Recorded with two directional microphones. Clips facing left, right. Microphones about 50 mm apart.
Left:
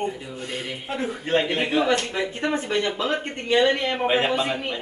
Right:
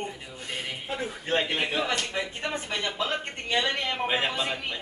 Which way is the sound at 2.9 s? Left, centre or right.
Centre.